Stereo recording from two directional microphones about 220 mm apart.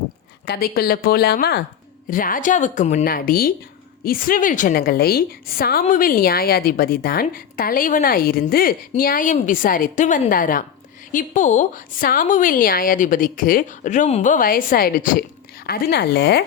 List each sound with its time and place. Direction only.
0.4 s a woman's voice: 45° left (ahead or behind)